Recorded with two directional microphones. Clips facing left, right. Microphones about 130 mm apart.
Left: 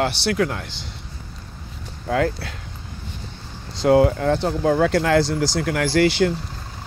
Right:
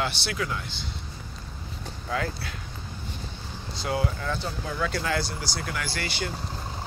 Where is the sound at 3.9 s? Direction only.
90° left.